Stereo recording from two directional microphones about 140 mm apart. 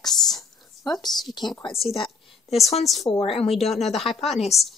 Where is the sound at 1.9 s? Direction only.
40° left (ahead or behind).